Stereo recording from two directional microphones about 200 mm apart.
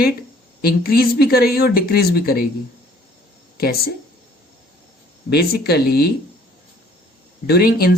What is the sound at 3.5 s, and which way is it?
Speech, 50° left (ahead or behind).